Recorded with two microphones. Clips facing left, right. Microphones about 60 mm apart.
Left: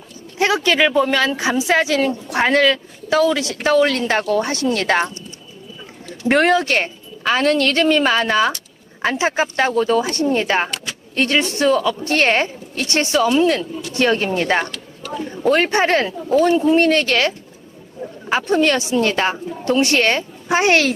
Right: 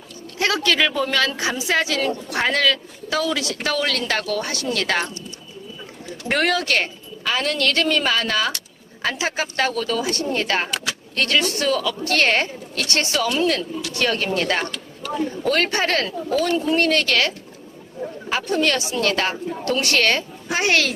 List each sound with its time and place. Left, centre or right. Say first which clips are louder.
0.3 s speech: left 4 dB; left
6.2 s speech: left 6 dB; left